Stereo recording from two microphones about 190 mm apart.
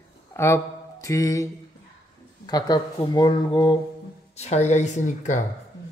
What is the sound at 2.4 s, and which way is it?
Speech, 20° left (ahead or behind).